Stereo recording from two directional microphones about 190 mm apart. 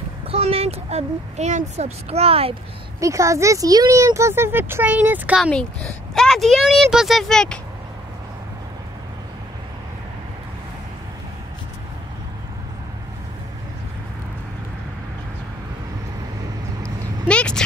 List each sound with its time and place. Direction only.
0.3 s speech: 30° right (ahead or behind)
3.0 s speech: 15° right (ahead or behind)
5.5 s speech: 5° left (ahead or behind)
16.8 s a sound: 5° left (ahead or behind)